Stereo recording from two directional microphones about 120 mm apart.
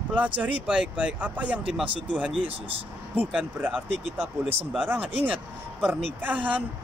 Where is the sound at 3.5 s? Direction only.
15° right (ahead or behind).